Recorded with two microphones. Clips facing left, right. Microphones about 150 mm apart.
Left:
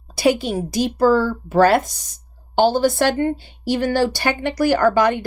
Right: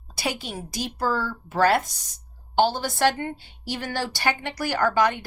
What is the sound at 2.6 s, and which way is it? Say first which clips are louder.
A woman's voice: left 7 dB; 45° left (ahead or behind).